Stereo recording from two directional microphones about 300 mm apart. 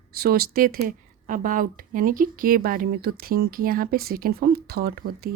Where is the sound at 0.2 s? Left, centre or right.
Right.